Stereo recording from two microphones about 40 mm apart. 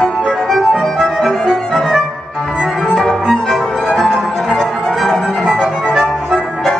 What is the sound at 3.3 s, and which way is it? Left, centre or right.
Violin, centre.